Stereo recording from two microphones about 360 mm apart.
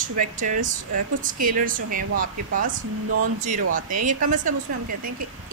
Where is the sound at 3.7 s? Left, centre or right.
Right.